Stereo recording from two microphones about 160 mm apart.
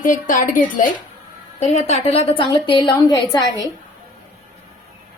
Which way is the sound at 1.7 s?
40° left (ahead or behind).